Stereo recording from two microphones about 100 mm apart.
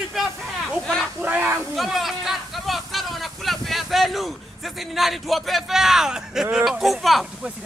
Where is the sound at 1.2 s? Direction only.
15° right (ahead or behind).